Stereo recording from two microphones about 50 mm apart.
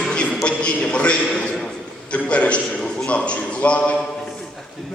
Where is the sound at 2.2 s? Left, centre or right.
Left.